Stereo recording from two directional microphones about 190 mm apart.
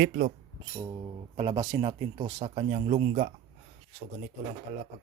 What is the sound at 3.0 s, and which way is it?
Mantra, 50° right (ahead or behind).